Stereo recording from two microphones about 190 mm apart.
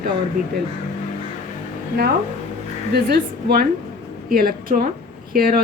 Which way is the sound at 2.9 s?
55° right (ahead or behind).